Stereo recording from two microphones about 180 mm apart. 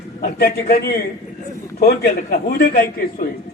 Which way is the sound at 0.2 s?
60° left (ahead or behind).